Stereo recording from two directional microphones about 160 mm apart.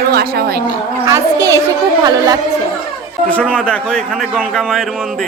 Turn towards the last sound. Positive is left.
turn(degrees=5)  # may be behind; listen again after turning